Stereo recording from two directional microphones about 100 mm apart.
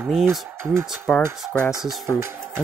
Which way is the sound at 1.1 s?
5° left (ahead or behind).